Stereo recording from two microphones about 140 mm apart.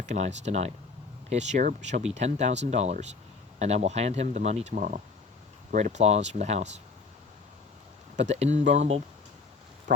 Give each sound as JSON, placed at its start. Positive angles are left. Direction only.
{"t": 0.0, "sound": "speech", "side_deg": -55}
{"t": 8.1, "sound": "speech", "side_deg": -50}